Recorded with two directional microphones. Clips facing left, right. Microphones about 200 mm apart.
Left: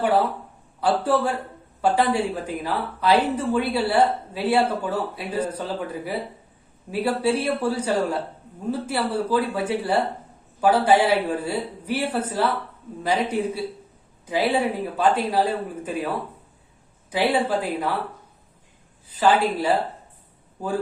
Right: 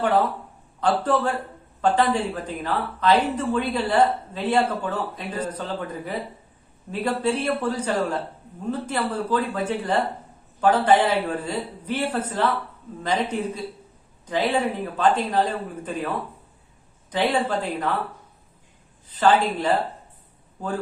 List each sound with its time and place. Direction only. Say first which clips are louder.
0.0 s speech: even; 10° left (ahead or behind)
19.0 s a woman's voice: even; 10° left (ahead or behind)